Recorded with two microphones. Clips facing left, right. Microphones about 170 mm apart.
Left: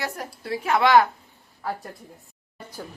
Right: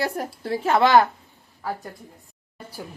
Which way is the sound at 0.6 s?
30° right (ahead or behind).